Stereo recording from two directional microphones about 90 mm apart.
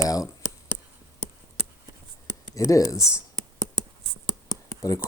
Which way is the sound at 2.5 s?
40° left (ahead or behind).